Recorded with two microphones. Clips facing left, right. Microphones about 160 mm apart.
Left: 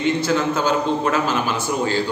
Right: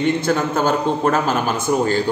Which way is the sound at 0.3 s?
50° right (ahead or behind).